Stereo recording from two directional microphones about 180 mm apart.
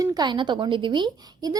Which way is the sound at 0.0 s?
20° right (ahead or behind).